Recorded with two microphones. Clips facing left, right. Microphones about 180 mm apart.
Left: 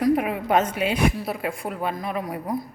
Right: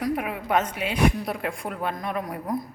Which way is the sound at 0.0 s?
25° left (ahead or behind).